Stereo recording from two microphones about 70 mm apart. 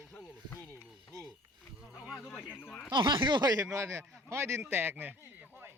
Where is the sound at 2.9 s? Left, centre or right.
Right.